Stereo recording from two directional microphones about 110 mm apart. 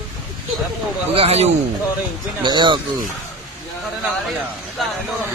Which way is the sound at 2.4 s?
40° right (ahead or behind).